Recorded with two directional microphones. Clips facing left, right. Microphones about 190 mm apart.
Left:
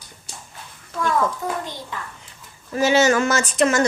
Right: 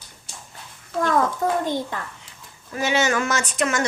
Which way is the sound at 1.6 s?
50° right (ahead or behind).